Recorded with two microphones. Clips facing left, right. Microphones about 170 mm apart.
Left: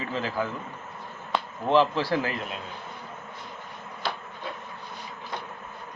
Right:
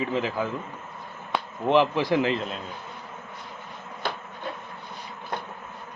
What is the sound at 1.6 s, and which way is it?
Speech, 15° right (ahead or behind).